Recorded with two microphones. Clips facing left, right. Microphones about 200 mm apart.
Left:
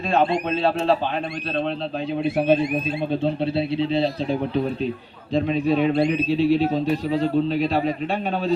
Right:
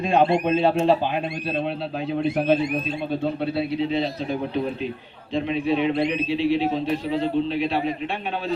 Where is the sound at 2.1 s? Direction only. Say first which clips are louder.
Left 1 dB; 5° left (ahead or behind).